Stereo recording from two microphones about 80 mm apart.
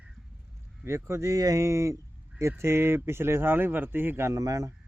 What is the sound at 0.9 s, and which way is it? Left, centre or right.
Speech, right.